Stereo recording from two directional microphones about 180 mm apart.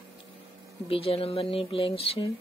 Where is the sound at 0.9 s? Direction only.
30° left (ahead or behind).